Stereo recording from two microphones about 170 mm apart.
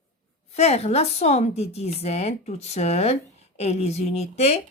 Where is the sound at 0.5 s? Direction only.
40° left (ahead or behind).